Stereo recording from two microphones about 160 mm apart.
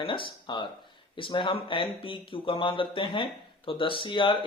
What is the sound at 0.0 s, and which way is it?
Speech, 30° left (ahead or behind).